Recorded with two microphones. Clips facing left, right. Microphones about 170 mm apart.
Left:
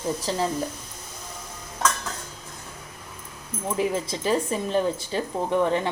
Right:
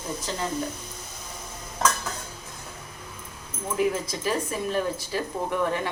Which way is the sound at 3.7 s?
30° left (ahead or behind).